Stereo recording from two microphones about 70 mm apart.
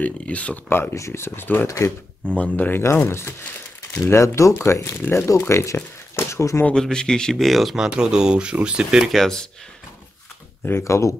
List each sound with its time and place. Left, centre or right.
0.0 s speech: centre
0.7 s speech: left
3.1 s speech: left
4.2 s speech: left
6.7 s speech: centre
9.1 s speech: centre
10.8 s speech: left